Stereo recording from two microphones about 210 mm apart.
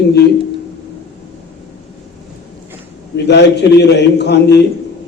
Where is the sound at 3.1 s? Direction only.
55° left (ahead or behind).